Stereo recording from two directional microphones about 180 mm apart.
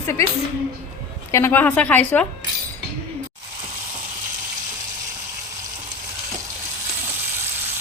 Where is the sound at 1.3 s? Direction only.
10° left (ahead or behind).